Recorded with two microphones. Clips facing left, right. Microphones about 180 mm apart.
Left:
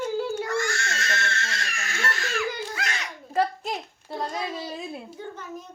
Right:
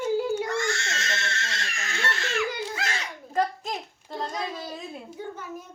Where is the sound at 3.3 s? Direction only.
5° left (ahead or behind).